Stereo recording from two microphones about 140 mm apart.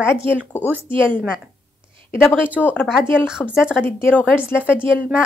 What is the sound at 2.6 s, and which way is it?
Speech, 15° left (ahead or behind).